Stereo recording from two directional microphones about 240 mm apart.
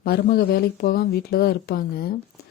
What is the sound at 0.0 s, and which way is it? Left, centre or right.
A woman's voice, left.